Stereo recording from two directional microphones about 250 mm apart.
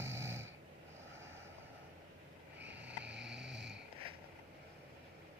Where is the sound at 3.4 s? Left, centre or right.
Right.